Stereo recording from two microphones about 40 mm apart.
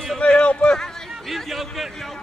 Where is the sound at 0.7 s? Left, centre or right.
Centre.